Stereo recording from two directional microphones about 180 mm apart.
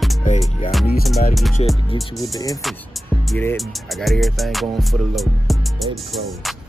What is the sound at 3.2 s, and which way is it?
Speech, 5° left (ahead or behind).